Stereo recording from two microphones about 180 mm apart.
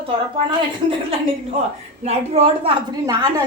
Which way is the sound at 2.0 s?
35° right (ahead or behind).